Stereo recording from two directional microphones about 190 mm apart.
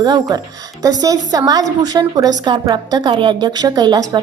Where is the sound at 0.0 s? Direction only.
20° right (ahead or behind).